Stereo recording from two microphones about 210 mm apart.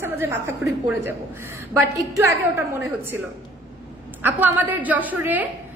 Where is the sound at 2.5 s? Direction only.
10° right (ahead or behind).